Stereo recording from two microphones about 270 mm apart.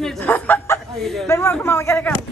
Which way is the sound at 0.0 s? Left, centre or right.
Centre.